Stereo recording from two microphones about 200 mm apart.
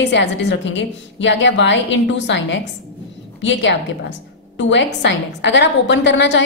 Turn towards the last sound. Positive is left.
turn(degrees=60)  # may be behind; listen again after turning